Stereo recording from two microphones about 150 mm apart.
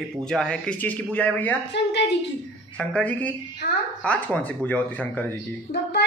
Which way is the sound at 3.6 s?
90° left.